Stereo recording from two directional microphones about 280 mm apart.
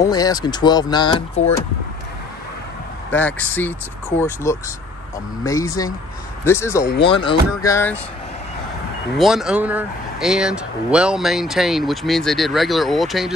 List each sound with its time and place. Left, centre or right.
0.1 s speech: centre
3.1 s speech: centre
6.8 s speech: left
7.1 s speech: centre
9.2 s speech: centre